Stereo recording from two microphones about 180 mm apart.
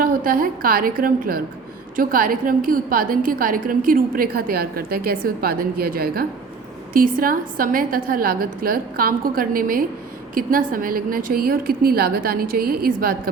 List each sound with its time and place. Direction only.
0.0 s a woman's voice: 50° right (ahead or behind)